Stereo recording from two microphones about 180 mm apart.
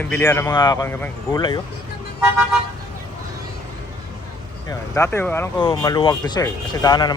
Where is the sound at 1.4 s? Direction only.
25° left (ahead or behind).